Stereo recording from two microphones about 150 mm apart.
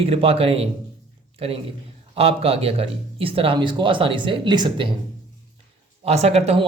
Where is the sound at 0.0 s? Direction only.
40° right (ahead or behind).